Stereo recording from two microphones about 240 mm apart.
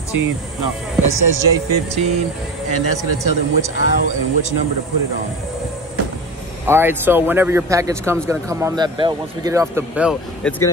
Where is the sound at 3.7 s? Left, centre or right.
Left.